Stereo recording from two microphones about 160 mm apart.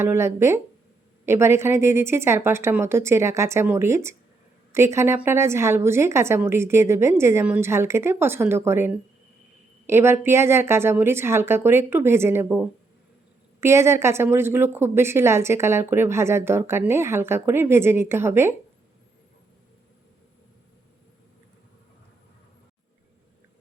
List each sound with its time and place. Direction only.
0.0 s a woman's voice: 15° right (ahead or behind)